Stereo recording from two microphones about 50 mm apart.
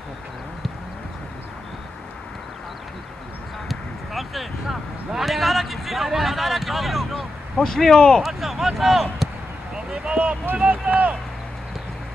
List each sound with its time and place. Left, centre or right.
3.6 s speech: centre
7.5 s speech: centre
8.2 s speech: centre
9.8 s a sound: right
10.5 s speech: right